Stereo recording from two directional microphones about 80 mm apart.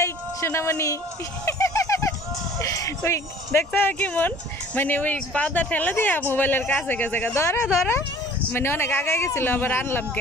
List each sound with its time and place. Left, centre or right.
0.0 s a sound: left
2.6 s speech: left
3.7 s speech: left
7.3 s speech: left